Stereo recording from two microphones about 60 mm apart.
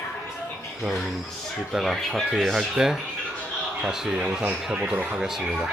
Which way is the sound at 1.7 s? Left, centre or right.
Centre.